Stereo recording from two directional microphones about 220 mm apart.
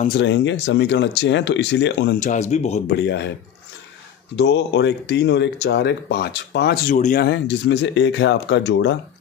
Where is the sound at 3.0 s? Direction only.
55° left (ahead or behind).